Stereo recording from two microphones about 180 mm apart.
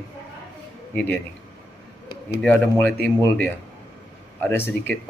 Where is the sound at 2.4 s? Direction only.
5° left (ahead or behind).